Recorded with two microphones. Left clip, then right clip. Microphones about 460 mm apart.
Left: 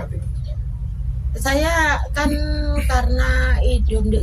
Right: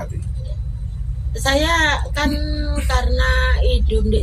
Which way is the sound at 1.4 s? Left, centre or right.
Left.